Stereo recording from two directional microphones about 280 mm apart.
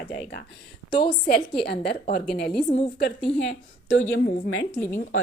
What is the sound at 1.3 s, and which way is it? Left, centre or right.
Speech, left.